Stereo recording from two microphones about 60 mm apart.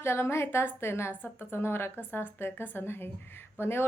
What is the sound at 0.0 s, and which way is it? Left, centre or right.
A woman's voice, left.